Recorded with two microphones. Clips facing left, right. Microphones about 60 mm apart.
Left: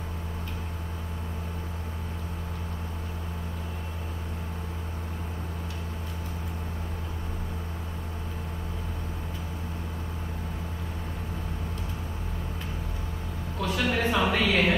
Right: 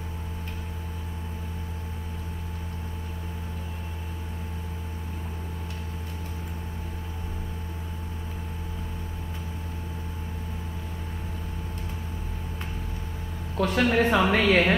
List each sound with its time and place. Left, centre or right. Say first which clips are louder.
13.6 s speech: right 5 dB; right